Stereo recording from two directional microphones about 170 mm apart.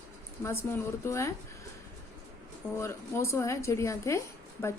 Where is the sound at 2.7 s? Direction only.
15° left (ahead or behind).